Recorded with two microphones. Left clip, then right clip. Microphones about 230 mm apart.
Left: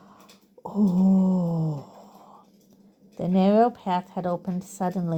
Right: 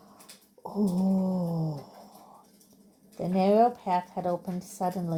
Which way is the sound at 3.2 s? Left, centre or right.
Left.